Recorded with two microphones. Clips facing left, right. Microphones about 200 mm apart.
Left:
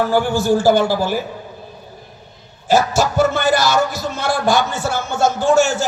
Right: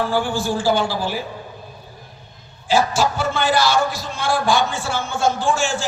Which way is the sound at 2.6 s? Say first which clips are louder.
Left 3 dB; 45° left (ahead or behind).